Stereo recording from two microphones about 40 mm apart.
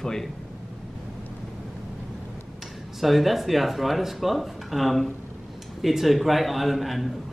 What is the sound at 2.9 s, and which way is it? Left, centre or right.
A man's voice, centre.